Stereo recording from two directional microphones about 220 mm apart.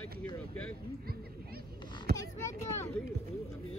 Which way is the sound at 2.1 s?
10° left (ahead or behind).